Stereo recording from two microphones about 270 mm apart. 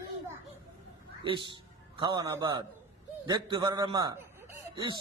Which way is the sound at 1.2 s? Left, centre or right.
Centre.